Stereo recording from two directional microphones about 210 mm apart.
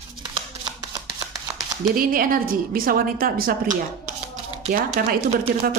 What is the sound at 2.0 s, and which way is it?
A woman's voice, 40° right (ahead or behind).